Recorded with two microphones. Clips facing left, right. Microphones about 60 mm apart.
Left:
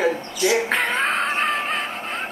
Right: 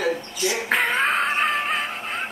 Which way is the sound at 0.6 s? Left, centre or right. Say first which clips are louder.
Even; centre.